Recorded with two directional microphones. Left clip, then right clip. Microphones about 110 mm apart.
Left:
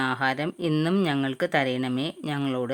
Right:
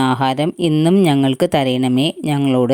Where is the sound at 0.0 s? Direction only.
50° right (ahead or behind).